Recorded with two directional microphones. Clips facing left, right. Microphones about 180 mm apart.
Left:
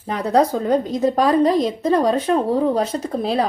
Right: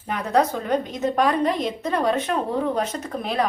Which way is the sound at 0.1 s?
35° left (ahead or behind).